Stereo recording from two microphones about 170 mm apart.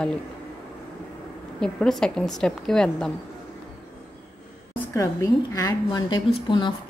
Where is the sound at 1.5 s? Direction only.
5° left (ahead or behind).